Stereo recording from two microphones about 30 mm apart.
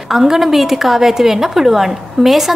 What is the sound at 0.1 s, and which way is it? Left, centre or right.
A woman's voice, centre.